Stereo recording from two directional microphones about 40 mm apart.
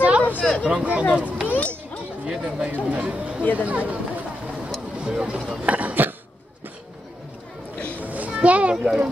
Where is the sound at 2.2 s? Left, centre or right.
Centre.